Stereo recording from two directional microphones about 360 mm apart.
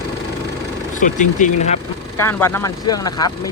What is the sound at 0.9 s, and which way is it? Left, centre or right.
Speech, left.